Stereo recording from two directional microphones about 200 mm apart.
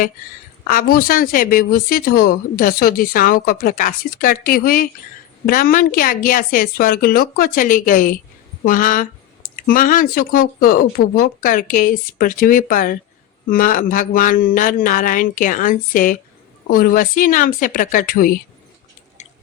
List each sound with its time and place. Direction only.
0.7 s a woman's voice: 45° left (ahead or behind)